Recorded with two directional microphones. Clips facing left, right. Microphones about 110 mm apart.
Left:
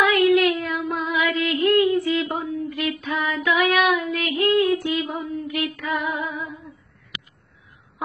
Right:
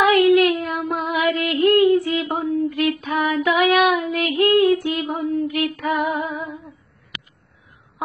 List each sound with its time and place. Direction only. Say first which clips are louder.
0.0 s child singing: right 3 dB; 45° right (ahead or behind)
5.5 s female singing: right 4 dB; 45° right (ahead or behind)